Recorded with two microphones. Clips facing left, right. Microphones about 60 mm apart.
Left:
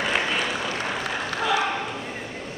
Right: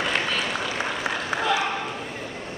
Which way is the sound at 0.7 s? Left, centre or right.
Centre.